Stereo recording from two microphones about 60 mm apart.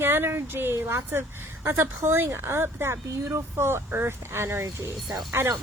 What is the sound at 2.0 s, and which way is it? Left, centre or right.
A woman's voice, right.